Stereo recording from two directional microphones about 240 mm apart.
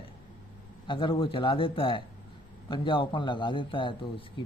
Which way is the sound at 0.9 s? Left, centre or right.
Left.